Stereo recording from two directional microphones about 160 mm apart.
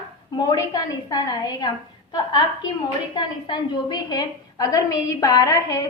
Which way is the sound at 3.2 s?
30° left (ahead or behind).